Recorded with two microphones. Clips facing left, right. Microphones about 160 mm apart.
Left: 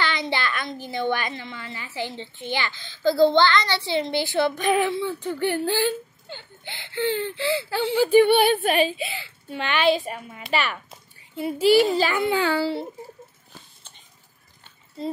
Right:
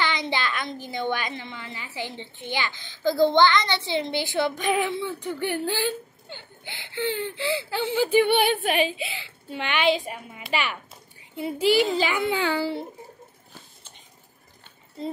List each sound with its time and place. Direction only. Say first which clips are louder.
0.0 s a woman's voice: left 1 dB; 20° right (ahead or behind)